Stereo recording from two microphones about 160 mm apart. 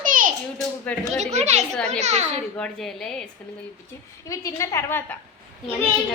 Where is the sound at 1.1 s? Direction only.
45° right (ahead or behind).